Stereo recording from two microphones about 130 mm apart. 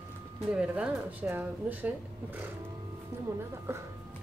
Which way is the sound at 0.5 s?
10° right (ahead or behind).